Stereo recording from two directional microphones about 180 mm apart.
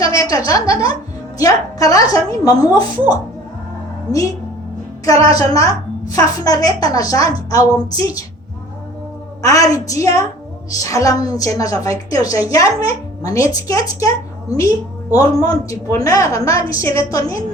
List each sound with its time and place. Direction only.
0.0 s a woman's voice: 20° left (ahead or behind)
5.0 s a woman's voice: 20° left (ahead or behind)
9.4 s a woman's voice: 20° left (ahead or behind)
15.1 s a woman's voice: 20° left (ahead or behind)